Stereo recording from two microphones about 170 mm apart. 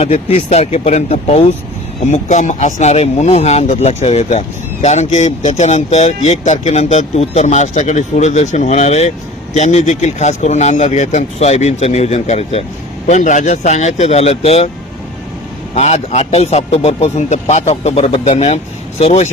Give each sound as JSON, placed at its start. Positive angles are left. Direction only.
{"t": 0.0, "sound": "speech", "side_deg": 35}
{"t": 15.7, "sound": "speech", "side_deg": 40}